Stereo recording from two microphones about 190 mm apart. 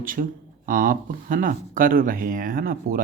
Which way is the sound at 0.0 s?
45° right (ahead or behind).